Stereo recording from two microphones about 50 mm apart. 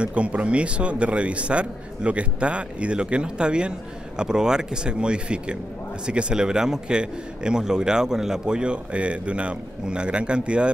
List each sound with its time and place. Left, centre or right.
0.0 s a man's voice: right